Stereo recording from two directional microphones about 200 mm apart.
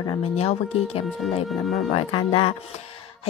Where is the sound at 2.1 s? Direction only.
25° left (ahead or behind).